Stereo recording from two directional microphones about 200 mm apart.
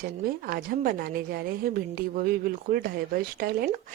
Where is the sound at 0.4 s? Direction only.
50° right (ahead or behind).